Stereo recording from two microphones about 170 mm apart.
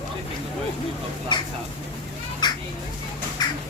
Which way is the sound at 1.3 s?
25° left (ahead or behind).